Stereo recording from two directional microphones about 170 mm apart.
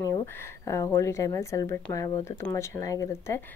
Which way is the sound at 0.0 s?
20° left (ahead or behind).